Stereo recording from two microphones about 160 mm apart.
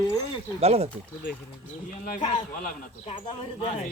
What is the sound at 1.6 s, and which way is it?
Speech, 55° left (ahead or behind).